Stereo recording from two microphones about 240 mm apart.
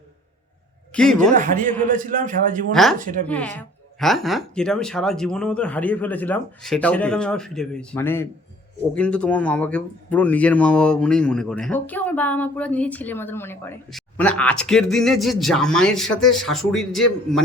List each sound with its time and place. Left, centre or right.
0.9 s speech: centre
1.3 s a man's voice: right
3.2 s speech: centre